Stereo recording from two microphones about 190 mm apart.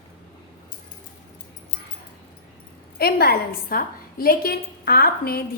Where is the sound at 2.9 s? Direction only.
55° left (ahead or behind).